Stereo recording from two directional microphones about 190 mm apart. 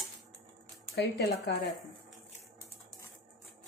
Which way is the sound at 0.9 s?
60° left (ahead or behind).